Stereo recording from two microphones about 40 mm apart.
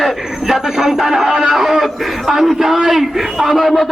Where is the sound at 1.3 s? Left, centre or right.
Right.